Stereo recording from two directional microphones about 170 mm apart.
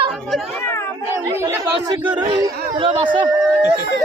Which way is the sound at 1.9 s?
25° right (ahead or behind).